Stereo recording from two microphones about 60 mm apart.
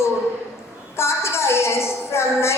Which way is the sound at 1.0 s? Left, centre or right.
Left.